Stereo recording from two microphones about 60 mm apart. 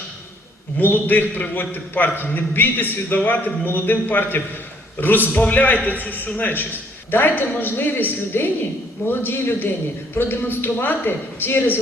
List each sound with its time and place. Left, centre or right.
0.8 s a man's voice: left